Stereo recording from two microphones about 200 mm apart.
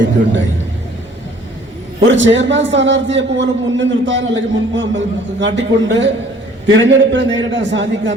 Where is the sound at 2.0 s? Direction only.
65° right (ahead or behind).